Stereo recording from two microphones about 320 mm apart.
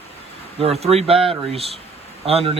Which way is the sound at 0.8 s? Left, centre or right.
Centre.